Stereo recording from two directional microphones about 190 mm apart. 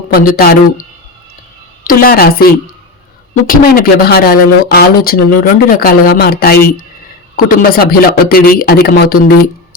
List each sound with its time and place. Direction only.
0.1 s speech: 50° left (ahead or behind)